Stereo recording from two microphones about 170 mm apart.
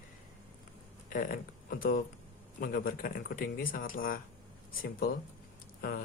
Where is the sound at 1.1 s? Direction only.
55° left (ahead or behind).